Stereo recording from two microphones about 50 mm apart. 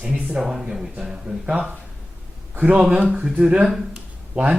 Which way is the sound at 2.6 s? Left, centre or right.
Right.